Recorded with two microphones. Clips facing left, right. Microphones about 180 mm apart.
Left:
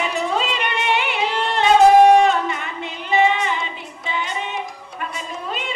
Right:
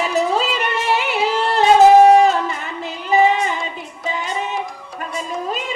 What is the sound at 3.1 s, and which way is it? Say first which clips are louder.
Child singing: right 3 dB; 40° right (ahead or behind).